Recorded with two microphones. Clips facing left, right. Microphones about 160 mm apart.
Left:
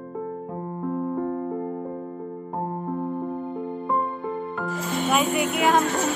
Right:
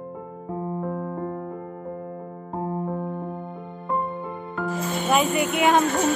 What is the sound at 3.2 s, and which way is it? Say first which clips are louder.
Music: left 4 dB; centre (ahead or behind).